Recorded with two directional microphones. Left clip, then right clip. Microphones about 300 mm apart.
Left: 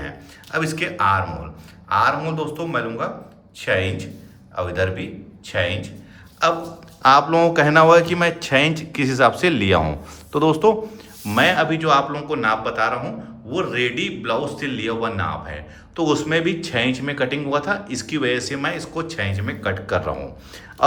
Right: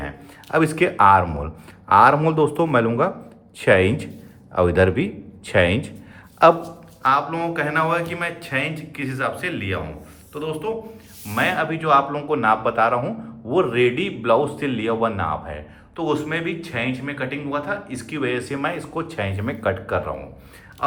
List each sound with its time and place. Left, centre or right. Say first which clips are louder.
0.5 s speech: right 4 dB; centre
7.0 s a man's voice: left 6 dB; centre